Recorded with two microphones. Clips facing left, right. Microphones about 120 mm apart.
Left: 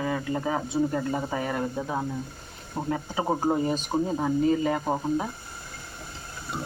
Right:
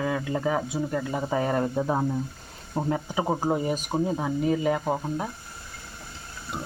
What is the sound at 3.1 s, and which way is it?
Speech, 5° right (ahead or behind).